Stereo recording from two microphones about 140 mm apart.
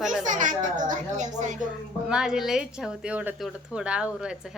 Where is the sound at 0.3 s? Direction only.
65° right (ahead or behind).